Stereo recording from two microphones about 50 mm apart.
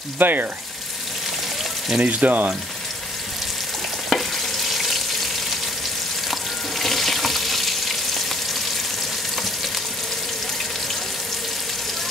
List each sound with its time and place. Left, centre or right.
0.2 s speech: right
2.0 s speech: right
4.1 s frying: centre
6.8 s water tap: centre